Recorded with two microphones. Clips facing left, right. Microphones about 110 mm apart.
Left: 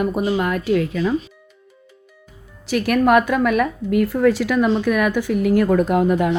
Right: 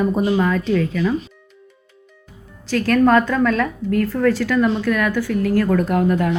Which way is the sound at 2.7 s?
15° left (ahead or behind).